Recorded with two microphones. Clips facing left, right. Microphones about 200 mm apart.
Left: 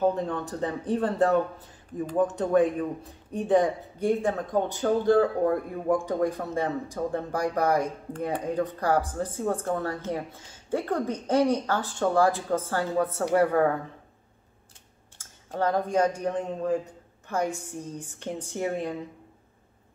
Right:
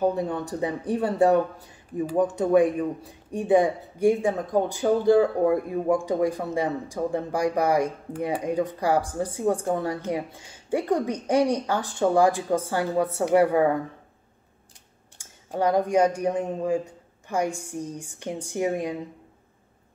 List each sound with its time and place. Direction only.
0.0 s speech: 10° right (ahead or behind)
15.1 s a sound: 15° right (ahead or behind)
16.2 s speech: 10° right (ahead or behind)